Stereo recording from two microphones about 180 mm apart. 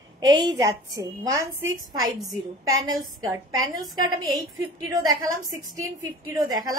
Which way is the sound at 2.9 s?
20° right (ahead or behind).